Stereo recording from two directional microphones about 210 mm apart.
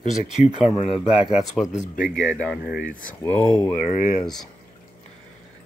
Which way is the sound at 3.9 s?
40° left (ahead or behind).